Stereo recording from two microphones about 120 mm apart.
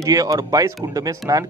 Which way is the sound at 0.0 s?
30° right (ahead or behind).